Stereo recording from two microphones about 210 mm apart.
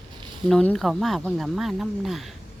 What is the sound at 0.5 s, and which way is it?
Speech, 5° left (ahead or behind).